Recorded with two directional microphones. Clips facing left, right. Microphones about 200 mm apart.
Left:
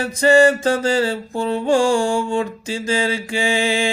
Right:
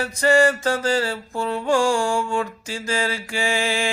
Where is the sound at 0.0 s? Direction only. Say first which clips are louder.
Left 4 dB; 20° left (ahead or behind).